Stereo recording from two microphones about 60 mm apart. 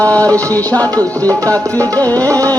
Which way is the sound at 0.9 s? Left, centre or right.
Right.